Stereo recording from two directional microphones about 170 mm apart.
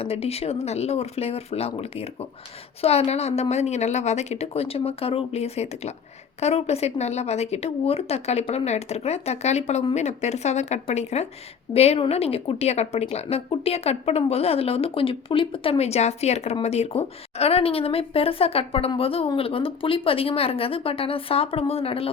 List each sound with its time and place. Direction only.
0.0 s a woman's voice: 35° left (ahead or behind)